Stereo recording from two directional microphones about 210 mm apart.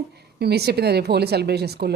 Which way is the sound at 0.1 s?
50° right (ahead or behind).